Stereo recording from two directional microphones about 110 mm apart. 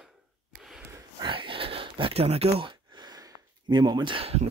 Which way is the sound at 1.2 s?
50° right (ahead or behind).